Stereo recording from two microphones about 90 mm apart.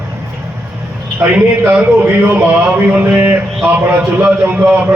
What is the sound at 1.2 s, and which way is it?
Speech, 30° right (ahead or behind).